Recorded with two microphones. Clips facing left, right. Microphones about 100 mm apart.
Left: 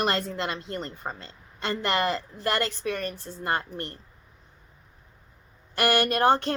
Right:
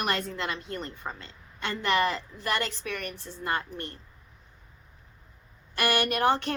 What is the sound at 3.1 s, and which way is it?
Speech, 45° left (ahead or behind).